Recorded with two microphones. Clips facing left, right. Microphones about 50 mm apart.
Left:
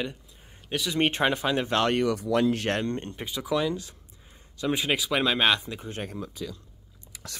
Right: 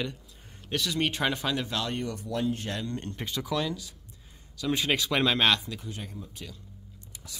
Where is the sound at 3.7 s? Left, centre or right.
Left.